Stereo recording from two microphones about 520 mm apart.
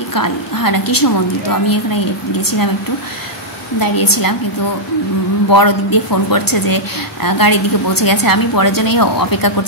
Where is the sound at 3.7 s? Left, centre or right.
Left.